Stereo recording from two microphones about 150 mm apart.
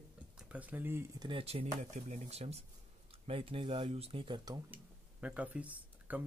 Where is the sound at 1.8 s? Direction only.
50° right (ahead or behind); by 4.5 s 35° right (ahead or behind).